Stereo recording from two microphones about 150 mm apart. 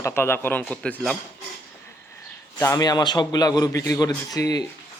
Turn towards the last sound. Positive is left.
turn(degrees=25)  # may be behind; listen again after turning